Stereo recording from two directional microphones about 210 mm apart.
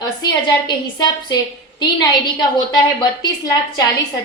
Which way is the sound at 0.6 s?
20° left (ahead or behind).